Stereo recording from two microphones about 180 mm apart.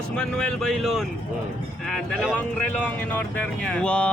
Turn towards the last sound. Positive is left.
turn(degrees=5)  # may be behind; listen again after turning